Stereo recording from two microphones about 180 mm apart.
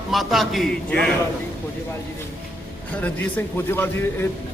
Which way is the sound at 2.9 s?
10° left (ahead or behind).